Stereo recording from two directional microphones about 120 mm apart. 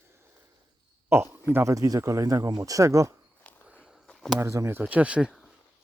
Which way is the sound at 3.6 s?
5° right (ahead or behind).